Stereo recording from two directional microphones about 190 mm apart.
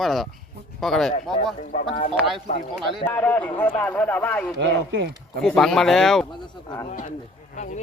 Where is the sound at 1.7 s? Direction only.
35° left (ahead or behind).